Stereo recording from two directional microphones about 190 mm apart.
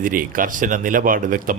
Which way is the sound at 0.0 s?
45° right (ahead or behind).